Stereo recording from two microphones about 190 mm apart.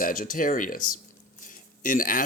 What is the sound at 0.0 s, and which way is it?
Speech, 45° left (ahead or behind).